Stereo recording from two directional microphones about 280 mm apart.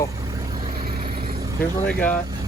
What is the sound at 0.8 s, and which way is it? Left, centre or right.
Vehicle, right.